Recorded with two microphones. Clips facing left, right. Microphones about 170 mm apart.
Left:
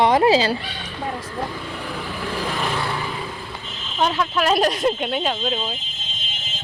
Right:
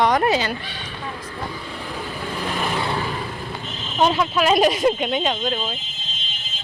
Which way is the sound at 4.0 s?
15° right (ahead or behind).